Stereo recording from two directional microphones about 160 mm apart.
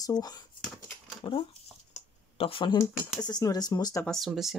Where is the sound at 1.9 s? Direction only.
35° left (ahead or behind).